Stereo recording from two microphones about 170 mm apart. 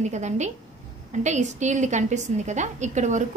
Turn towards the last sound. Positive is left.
turn(degrees=-45)  # may be behind; listen again after turning